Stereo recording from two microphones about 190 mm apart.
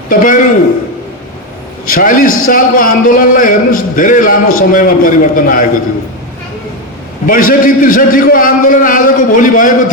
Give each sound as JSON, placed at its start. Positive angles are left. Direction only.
{"t": 0.1, "sound": "a man's voice", "side_deg": 45}
{"t": 1.9, "sound": "a man's voice", "side_deg": 45}
{"t": 7.3, "sound": "a man's voice", "side_deg": 45}